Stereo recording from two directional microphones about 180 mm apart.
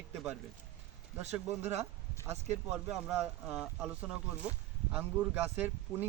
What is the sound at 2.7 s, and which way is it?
Speech, 10° right (ahead or behind).